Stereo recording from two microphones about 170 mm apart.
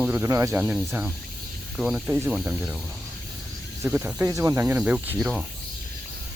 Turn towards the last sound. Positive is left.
turn(degrees=0)  # may be behind; listen again after turning